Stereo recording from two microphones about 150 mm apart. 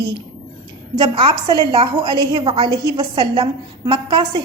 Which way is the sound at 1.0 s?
30° right (ahead or behind).